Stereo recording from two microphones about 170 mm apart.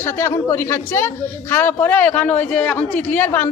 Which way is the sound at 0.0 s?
15° left (ahead or behind).